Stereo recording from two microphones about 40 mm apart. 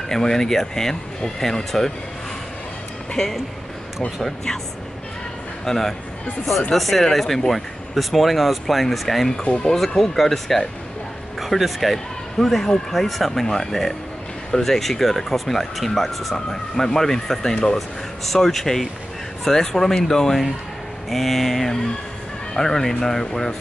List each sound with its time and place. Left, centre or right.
0.1 s speech: centre
3.2 s speech: centre
5.7 s speech: centre
9.4 s speech: left
9.7 s speech: centre